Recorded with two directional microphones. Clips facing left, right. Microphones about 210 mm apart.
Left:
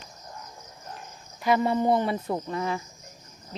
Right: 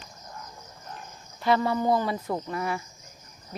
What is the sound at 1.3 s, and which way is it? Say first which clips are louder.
Speech: left 1 dB; 15° left (ahead or behind).